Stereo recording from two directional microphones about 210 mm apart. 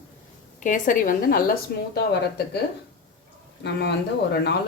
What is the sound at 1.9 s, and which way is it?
Speech, 50° left (ahead or behind).